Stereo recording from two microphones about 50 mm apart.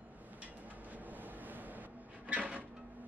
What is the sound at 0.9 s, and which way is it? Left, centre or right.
Cupboard open or close, right.